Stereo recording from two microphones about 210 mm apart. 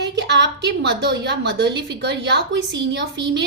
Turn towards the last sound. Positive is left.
turn(degrees=-55)  # may be behind; listen again after turning